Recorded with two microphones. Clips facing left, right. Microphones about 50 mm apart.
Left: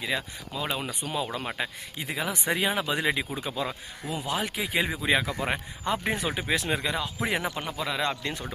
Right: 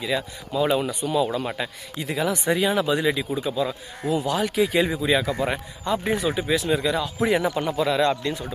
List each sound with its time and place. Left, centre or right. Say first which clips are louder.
0.0 s speech: right 4 dB; centre
0.5 s speech: right 10 dB; centre
0.9 s speech: right 8 dB; centre
4.3 s speech: right 5 dB; centre
5.0 s speech: right 4 dB; left
6.8 s speech: right 7 dB; centre